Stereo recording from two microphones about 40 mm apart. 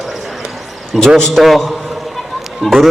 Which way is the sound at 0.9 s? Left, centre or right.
Centre.